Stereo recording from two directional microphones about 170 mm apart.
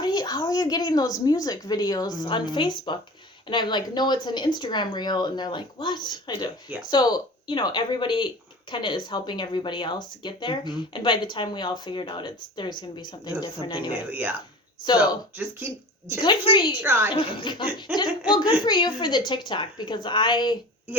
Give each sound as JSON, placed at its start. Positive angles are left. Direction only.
{"t": 0.0, "sound": "speech", "side_deg": 25}
{"t": 13.9, "sound": "speech", "side_deg": -10}
{"t": 16.2, "sound": "speech", "side_deg": 30}
{"t": 16.8, "sound": "speech", "side_deg": -10}
{"t": 17.2, "sound": "speech", "side_deg": 30}